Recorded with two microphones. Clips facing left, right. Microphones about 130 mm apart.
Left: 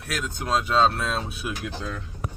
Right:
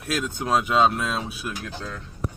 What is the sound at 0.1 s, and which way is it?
Speech, 25° right (ahead or behind).